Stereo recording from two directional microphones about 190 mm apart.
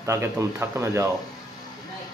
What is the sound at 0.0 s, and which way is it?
Speech, 15° right (ahead or behind).